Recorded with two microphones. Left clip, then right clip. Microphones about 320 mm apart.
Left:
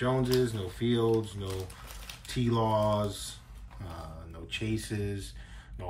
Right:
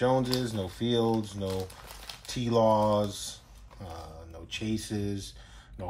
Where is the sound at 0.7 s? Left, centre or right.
Centre.